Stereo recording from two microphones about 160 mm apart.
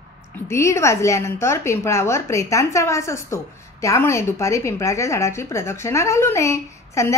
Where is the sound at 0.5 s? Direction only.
20° left (ahead or behind).